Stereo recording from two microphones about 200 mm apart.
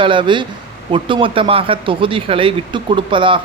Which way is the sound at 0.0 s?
25° right (ahead or behind).